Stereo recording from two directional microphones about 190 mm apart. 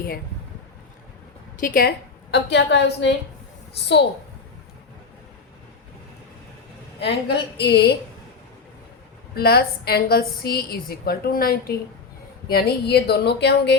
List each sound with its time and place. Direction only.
1.5 s a woman's voice: 45° left (ahead or behind)
2.3 s speech: 65° left (ahead or behind)
7.0 s speech: 65° left (ahead or behind)
9.3 s a woman's voice: 55° left (ahead or behind)